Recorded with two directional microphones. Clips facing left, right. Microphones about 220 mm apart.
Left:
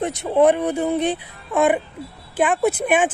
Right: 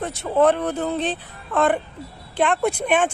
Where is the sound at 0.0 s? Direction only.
15° left (ahead or behind).